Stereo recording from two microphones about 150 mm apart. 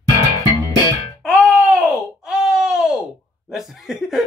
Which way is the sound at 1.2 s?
5° right (ahead or behind).